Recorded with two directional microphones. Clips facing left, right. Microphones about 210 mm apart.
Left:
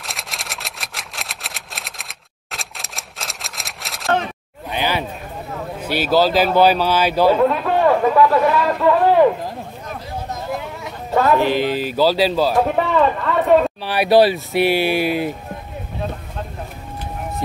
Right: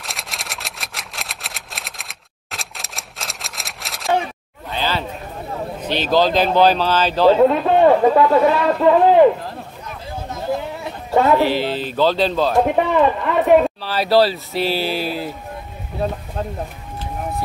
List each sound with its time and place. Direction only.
0.0 s camera: centre (ahead or behind)
4.6 s a sound: 15° left (ahead or behind)
5.8 s speech: 10° left (ahead or behind)
7.4 s a man's voice: 25° right (ahead or behind)
10.8 s a sound: 20° right (ahead or behind)
11.3 s speech: 15° left (ahead or behind)
12.6 s speech: 15° right (ahead or behind)
13.8 s speech: 15° left (ahead or behind)